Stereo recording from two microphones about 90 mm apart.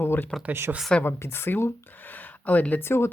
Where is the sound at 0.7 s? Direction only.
20° right (ahead or behind).